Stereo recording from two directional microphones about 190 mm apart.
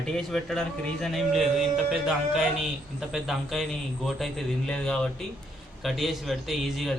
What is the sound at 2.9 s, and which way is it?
A man's voice, centre (ahead or behind).